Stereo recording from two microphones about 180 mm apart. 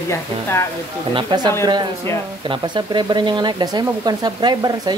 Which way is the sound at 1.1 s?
25° right (ahead or behind).